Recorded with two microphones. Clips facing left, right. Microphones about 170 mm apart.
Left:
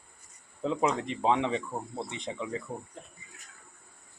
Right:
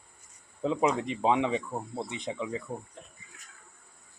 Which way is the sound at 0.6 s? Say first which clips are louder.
Right 1 dB; 10° right (ahead or behind).